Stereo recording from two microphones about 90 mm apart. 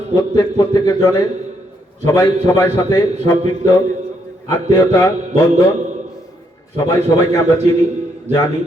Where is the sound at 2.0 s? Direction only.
35° left (ahead or behind).